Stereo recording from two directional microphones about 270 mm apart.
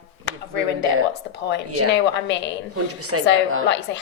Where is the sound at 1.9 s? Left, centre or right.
Left.